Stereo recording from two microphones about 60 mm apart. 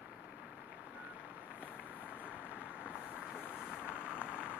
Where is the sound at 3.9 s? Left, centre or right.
Centre.